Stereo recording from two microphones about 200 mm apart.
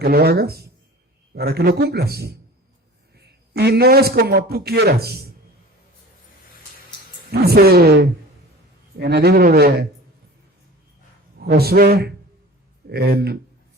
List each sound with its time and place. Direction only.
0.0 s a man's voice: 50° right (ahead or behind)
7.3 s a man's voice: 50° right (ahead or behind)
11.3 s a man's voice: 50° right (ahead or behind)